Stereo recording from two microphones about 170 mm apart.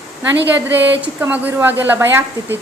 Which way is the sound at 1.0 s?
10° right (ahead or behind).